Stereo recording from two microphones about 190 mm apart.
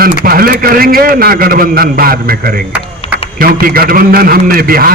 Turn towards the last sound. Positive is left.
turn(degrees=-50)  # may be behind; listen again after turning